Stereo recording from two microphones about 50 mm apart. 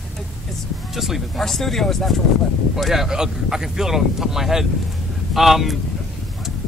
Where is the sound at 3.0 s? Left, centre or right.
Centre.